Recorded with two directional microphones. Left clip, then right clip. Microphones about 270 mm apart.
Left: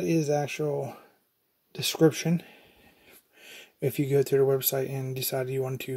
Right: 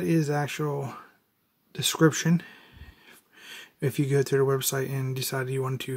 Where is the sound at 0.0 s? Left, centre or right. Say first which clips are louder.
Left 1 dB; centre.